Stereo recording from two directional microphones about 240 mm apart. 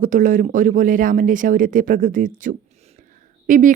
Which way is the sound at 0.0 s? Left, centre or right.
Right.